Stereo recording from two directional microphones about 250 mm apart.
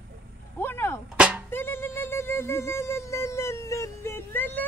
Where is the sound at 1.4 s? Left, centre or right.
Centre.